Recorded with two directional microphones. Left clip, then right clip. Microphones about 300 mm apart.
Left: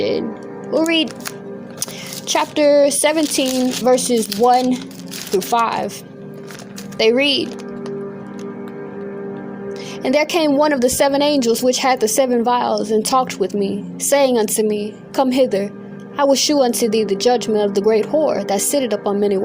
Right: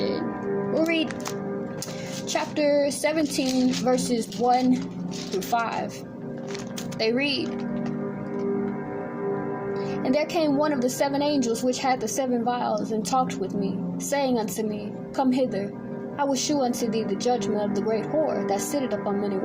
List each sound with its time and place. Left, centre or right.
0.7 s a woman's voice: left
2.2 s a woman's voice: left
7.0 s a woman's voice: left
10.0 s a woman's voice: left